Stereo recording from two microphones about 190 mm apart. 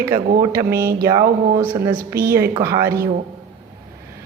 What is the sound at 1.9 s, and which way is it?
Speech, 50° right (ahead or behind).